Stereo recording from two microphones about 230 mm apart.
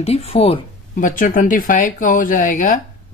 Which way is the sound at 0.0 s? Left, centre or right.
Left.